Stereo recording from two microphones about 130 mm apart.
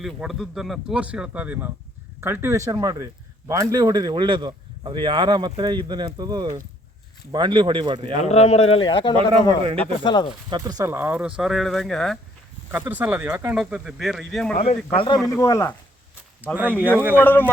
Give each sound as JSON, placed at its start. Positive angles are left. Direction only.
{"t": 0.0, "sound": "speech", "side_deg": 0}
{"t": 8.2, "sound": "speech", "side_deg": 55}
{"t": 9.1, "sound": "speech", "side_deg": -45}
{"t": 10.0, "sound": "speech", "side_deg": 35}
{"t": 10.6, "sound": "speech", "side_deg": -25}
{"t": 10.9, "sound": "speech", "side_deg": -15}
{"t": 12.7, "sound": "speech", "side_deg": -15}
{"t": 14.9, "sound": "speech", "side_deg": 40}
{"t": 15.3, "sound": "speech", "side_deg": 25}
{"t": 16.6, "sound": "speech", "side_deg": -15}
{"t": 17.2, "sound": "a man's voice", "side_deg": 15}